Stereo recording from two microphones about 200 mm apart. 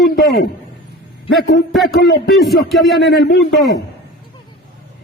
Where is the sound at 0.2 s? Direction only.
55° left (ahead or behind).